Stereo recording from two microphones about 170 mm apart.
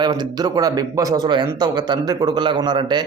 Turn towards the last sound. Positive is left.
turn(degrees=-25)  # may be behind; listen again after turning